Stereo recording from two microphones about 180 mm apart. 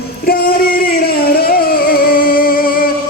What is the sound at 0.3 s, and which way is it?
Music, 55° left (ahead or behind).